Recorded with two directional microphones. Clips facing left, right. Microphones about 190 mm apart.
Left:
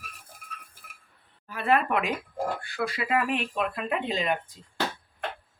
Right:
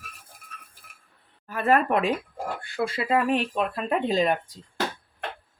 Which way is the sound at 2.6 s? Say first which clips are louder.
Right 3 dB; 25° right (ahead or behind).